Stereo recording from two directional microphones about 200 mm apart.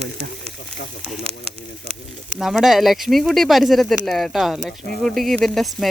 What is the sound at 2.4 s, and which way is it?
Speech, centre (ahead or behind).